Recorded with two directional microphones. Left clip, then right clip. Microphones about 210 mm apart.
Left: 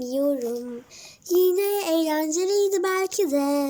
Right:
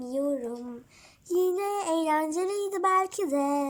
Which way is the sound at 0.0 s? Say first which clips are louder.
Left 5 dB; 30° right (ahead or behind).